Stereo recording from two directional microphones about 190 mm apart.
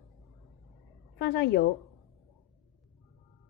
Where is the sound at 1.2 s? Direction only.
60° left (ahead or behind).